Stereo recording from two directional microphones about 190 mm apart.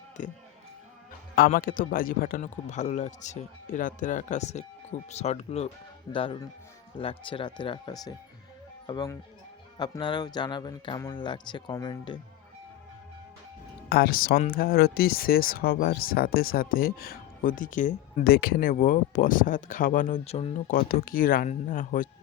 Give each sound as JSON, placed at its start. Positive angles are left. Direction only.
{"t": 0.2, "sound": "a man's voice", "side_deg": 40}
{"t": 1.5, "sound": "a man's voice", "side_deg": 45}
{"t": 13.9, "sound": "speech", "side_deg": 50}
{"t": 20.7, "sound": "speech", "side_deg": 50}